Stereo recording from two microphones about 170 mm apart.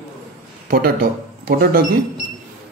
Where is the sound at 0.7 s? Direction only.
60° right (ahead or behind).